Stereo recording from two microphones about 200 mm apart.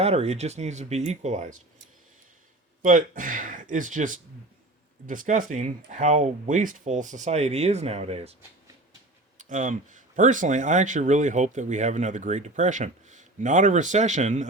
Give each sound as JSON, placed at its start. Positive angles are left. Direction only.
{"t": 0.0, "sound": "speech", "side_deg": -30}
{"t": 2.8, "sound": "speech", "side_deg": -40}
{"t": 9.4, "sound": "speech", "side_deg": -40}